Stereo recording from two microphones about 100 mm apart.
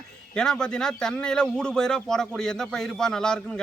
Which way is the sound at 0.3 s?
5° left (ahead or behind).